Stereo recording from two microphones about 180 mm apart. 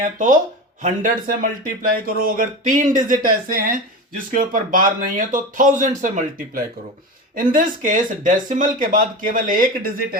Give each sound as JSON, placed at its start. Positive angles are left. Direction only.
{"t": 0.8, "sound": "speech", "side_deg": -45}